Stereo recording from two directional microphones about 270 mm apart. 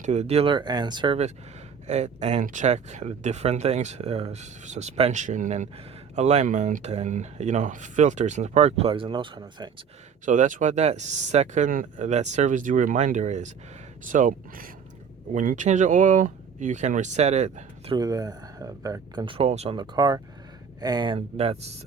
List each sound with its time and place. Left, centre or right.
0.0 s speech: right
10.2 s speech: right